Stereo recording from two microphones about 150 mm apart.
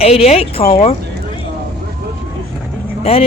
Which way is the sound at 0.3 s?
40° left (ahead or behind).